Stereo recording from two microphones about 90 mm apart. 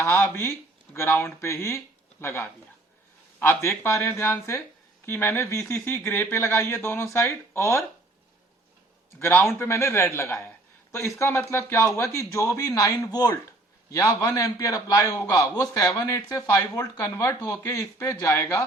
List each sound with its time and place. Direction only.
0.0 s speech: 25° left (ahead or behind)
9.1 s speech: 30° left (ahead or behind)